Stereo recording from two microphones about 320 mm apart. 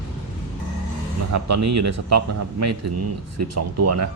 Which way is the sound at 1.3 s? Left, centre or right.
Right.